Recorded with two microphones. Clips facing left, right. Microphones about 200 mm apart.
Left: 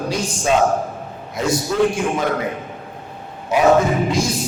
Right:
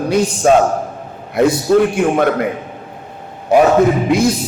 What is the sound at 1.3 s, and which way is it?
Speech, 60° right (ahead or behind).